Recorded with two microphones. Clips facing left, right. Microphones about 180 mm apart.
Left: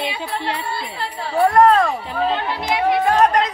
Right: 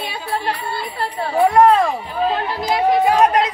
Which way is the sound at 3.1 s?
5° right (ahead or behind).